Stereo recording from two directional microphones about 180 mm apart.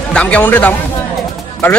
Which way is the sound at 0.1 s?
10° left (ahead or behind).